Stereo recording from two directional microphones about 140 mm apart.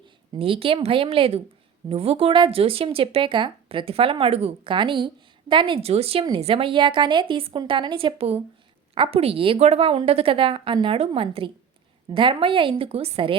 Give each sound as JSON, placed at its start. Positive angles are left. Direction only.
{"t": 0.3, "sound": "speech", "side_deg": -40}